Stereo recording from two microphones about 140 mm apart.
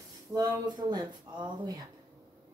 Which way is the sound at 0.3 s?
30° right (ahead or behind).